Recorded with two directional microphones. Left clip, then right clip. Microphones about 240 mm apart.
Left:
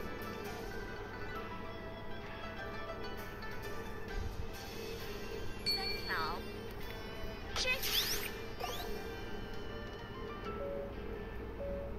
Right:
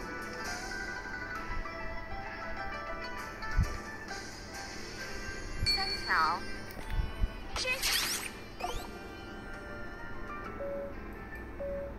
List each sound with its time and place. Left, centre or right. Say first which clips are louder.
5.7 s music: right 6 dB; centre
7.5 s music: right 3 dB; centre